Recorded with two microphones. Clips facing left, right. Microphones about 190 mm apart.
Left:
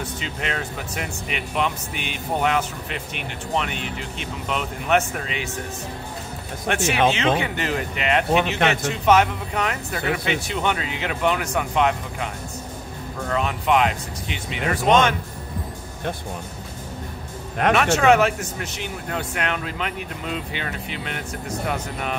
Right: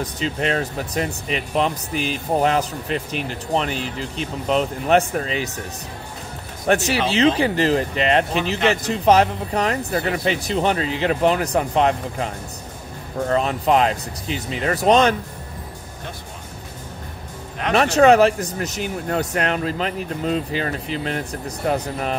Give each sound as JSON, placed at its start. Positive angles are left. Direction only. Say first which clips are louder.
{"t": 0.0, "sound": "speech", "louder": "right 6 dB", "side_deg": -35}
{"t": 6.7, "sound": "speech", "louder": "right 1 dB", "side_deg": -35}
{"t": 13.3, "sound": "speech", "louder": "right 3 dB", "side_deg": -35}
{"t": 17.7, "sound": "speech", "louder": "right 5 dB", "side_deg": -35}